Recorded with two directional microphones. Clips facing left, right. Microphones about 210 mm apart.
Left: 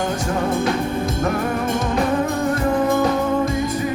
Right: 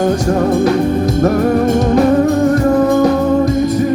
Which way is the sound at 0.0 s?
40° right (ahead or behind).